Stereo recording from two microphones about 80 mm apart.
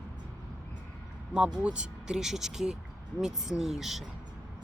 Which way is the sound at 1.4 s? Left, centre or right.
Centre.